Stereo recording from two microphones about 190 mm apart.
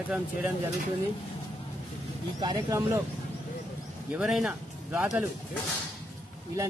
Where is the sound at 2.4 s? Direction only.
20° right (ahead or behind).